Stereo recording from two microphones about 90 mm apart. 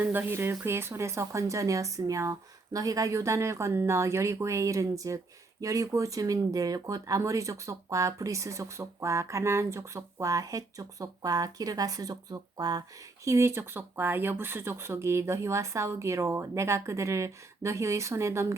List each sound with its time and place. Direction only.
0.0 s speech: 20° right (ahead or behind); by 12.8 s 45° right (ahead or behind)
13.2 s speech: 30° right (ahead or behind)